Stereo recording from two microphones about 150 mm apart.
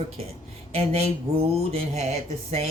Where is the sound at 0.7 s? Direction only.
40° right (ahead or behind).